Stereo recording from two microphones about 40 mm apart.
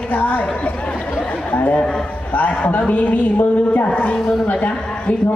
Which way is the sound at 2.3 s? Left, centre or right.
Left.